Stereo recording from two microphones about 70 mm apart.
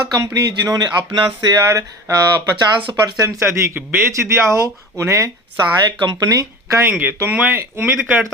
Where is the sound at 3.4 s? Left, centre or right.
Right.